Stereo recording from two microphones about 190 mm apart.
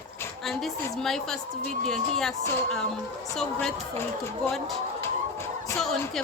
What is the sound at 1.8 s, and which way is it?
Speech, centre (ahead or behind).